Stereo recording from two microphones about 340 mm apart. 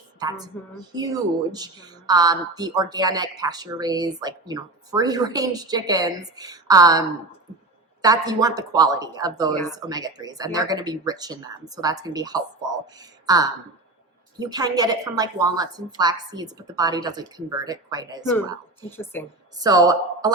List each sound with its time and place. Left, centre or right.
0.2 s a woman's voice: centre
18.8 s speech: centre
19.5 s a woman's voice: centre